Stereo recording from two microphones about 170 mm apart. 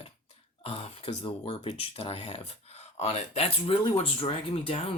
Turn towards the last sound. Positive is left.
turn(degrees=35)  # may be behind; listen again after turning